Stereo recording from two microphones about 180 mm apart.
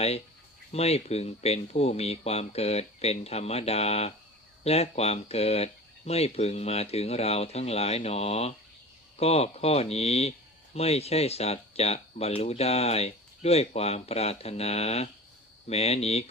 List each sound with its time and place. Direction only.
0.7 s speech: 35° left (ahead or behind)